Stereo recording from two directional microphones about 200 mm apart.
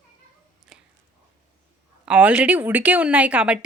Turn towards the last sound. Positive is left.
turn(degrees=-5)  # may be behind; listen again after turning